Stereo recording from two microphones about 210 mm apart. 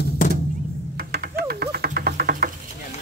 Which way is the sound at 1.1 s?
45° right (ahead or behind).